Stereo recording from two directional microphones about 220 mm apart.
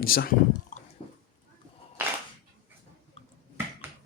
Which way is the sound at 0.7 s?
35° left (ahead or behind).